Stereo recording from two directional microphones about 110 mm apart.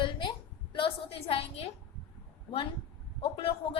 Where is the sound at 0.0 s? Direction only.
50° left (ahead or behind).